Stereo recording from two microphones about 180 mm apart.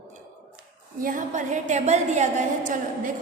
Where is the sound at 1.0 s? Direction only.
50° right (ahead or behind).